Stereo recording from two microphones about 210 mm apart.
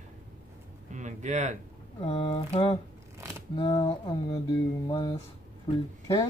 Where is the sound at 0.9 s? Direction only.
35° right (ahead or behind).